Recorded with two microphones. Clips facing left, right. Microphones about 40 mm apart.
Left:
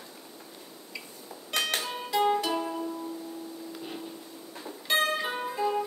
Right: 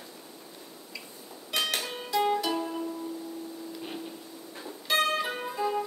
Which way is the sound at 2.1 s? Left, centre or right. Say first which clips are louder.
Left 1 dB; centre.